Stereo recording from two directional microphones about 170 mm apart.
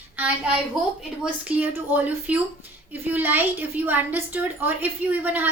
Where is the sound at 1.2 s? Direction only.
10° right (ahead or behind).